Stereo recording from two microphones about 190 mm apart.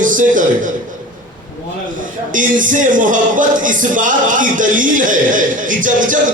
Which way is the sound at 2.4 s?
45° right (ahead or behind).